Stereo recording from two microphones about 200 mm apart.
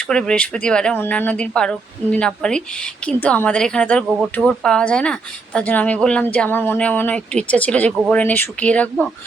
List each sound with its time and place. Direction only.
0.1 s speech: 5° left (ahead or behind)